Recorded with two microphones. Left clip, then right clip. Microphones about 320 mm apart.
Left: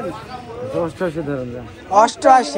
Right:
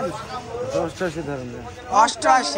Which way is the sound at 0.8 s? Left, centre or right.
Centre.